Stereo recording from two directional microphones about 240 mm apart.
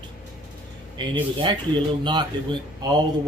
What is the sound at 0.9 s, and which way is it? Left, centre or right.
Speech, centre.